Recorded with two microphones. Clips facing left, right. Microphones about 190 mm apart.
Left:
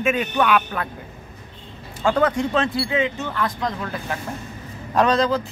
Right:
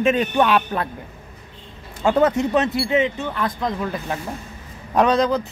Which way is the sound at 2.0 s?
20° right (ahead or behind).